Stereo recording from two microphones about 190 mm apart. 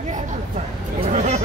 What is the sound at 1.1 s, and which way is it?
Chatter, 35° right (ahead or behind).